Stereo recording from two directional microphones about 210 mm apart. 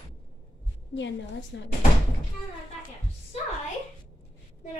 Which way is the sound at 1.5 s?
55° left (ahead or behind).